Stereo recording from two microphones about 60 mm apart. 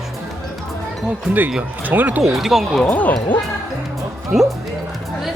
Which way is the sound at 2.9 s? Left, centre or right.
Left.